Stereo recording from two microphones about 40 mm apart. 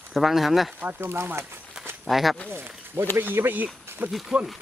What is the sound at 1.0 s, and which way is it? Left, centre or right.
Speech, right.